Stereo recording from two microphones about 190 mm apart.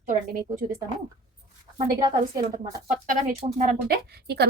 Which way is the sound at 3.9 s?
55° right (ahead or behind).